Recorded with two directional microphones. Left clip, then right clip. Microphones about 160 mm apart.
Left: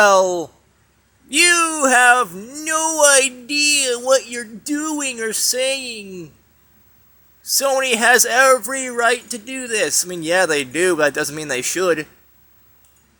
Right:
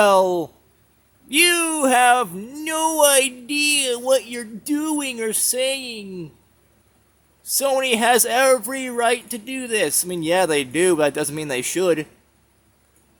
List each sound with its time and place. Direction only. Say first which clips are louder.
0.0 s speech: left 2 dB; 30° right (ahead or behind)
7.4 s speech: left 2 dB; 30° right (ahead or behind)